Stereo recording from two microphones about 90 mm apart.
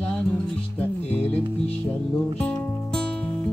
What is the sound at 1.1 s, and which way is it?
Music, 20° left (ahead or behind).